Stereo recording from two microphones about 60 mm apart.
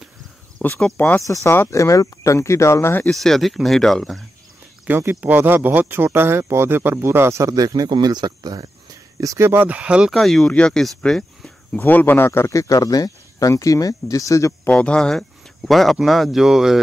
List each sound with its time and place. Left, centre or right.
0.6 s speech: left
1.2 s speech: left
3.1 s speech: centre
4.8 s speech: right
7.4 s speech: right
9.4 s speech: right
9.7 s speech: right
10.1 s speech: centre
10.5 s speech: centre
11.8 s speech: left
12.3 s speech: left
14.7 s speech: centre